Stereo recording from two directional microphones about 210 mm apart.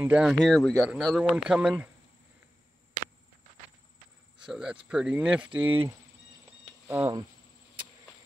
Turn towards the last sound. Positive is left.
turn(degrees=-15)  # may be behind; listen again after turning